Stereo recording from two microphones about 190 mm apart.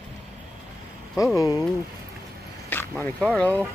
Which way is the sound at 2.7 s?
10° left (ahead or behind).